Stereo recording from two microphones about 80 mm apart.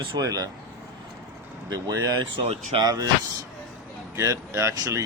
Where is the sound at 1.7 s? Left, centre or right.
Right.